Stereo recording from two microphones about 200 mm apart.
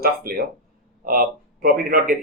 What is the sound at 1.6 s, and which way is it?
Speech, 45° right (ahead or behind).